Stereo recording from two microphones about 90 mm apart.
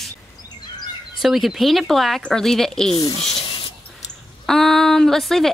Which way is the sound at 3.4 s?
70° left (ahead or behind).